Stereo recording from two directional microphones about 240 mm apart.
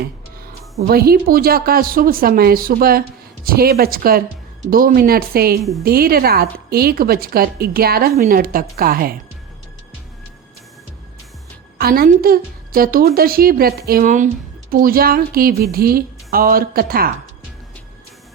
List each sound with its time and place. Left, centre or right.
0.8 s a woman's voice: right
11.8 s a woman's voice: right